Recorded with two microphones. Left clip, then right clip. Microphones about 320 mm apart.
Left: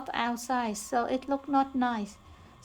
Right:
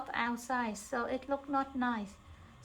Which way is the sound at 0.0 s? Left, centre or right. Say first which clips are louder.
Left 4 dB; left.